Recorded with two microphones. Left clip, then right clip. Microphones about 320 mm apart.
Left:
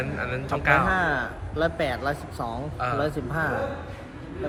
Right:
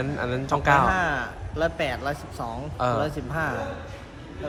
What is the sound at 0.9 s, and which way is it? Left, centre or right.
A man's voice, centre.